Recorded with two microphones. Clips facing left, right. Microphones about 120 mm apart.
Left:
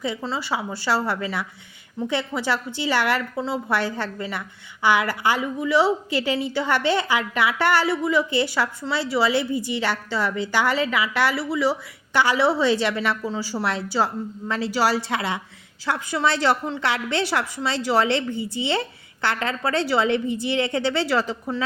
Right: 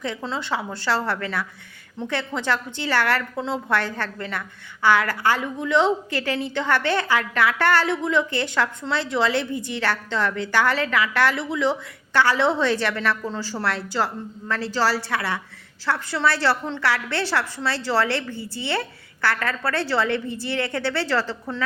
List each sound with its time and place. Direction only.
0.0 s a woman's voice: 5° left (ahead or behind)